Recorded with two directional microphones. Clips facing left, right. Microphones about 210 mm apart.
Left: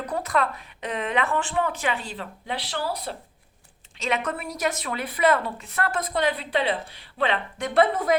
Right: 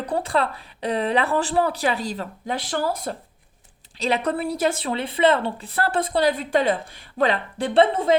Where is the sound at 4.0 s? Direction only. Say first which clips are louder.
Right 5 dB; 35° right (ahead or behind).